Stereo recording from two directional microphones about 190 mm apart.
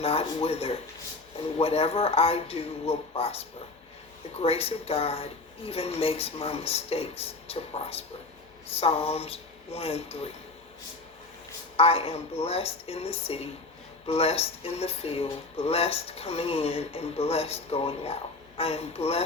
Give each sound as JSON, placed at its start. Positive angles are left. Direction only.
{"t": 0.0, "sound": "speech", "side_deg": 30}
{"t": 11.8, "sound": "speech", "side_deg": 30}